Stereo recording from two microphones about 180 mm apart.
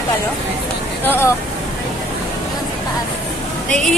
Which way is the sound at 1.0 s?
10° left (ahead or behind).